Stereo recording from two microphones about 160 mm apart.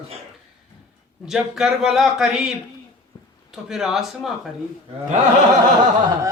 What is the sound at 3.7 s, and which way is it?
Speech, centre (ahead or behind).